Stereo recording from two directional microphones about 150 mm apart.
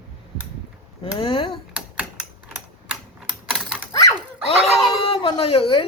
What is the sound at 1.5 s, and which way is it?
Typing, 5° right (ahead or behind).